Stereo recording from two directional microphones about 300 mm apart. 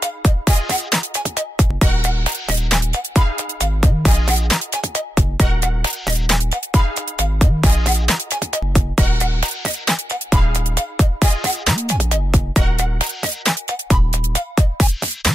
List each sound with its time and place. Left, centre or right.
0.2 s music: centre